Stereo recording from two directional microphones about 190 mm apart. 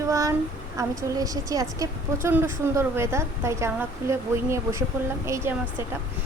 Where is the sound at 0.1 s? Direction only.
15° right (ahead or behind).